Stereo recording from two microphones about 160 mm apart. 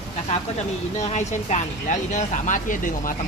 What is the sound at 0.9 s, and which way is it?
Speech, 45° left (ahead or behind).